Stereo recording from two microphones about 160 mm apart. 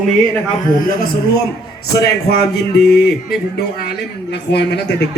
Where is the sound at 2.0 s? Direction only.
85° left.